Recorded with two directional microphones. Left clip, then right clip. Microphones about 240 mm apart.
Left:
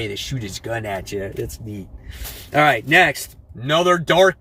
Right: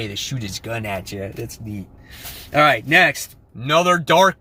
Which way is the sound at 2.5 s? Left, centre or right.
Centre.